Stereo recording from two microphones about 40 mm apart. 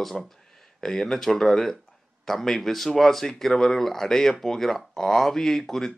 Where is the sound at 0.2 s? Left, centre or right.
Centre.